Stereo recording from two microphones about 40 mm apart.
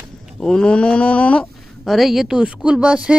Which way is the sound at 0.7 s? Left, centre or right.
Left.